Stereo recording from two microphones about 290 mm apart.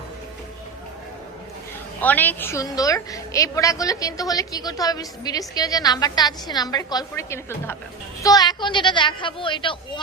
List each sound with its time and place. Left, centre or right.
2.0 s a woman's voice: centre